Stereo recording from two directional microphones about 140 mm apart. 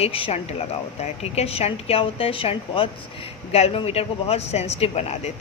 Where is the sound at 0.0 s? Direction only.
45° left (ahead or behind).